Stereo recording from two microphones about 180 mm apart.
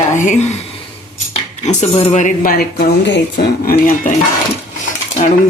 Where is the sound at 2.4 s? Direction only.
60° left (ahead or behind).